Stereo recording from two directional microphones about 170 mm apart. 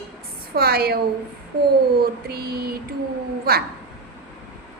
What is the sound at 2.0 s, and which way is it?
Speech, 65° right (ahead or behind).